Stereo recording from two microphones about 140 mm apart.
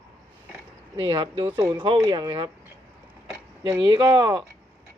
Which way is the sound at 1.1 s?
40° right (ahead or behind).